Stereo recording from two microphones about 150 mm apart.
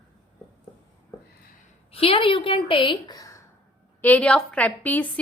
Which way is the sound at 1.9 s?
40° left (ahead or behind).